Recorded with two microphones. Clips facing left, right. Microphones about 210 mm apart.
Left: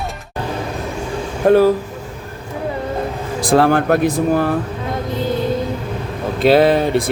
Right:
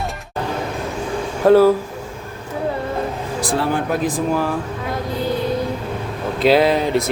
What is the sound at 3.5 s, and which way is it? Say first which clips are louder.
Speech: left 8 dB; 80° left.